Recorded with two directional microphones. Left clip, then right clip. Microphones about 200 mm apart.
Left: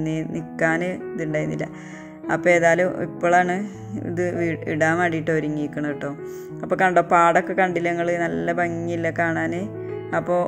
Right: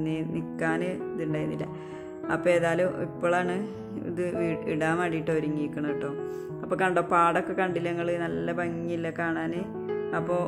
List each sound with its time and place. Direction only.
0.0 s speech: 20° left (ahead or behind)